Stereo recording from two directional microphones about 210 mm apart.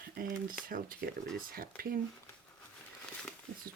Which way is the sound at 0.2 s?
45° right (ahead or behind).